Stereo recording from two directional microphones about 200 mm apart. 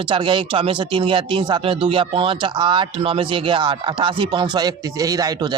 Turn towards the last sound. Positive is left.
turn(degrees=-20)  # may be behind; listen again after turning